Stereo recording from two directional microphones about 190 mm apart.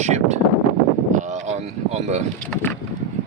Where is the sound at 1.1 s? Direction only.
40° right (ahead or behind).